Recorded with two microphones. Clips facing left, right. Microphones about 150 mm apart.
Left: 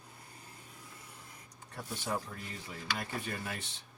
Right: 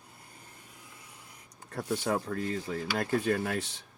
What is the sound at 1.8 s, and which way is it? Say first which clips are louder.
Speech: right 7 dB; 65° right (ahead or behind).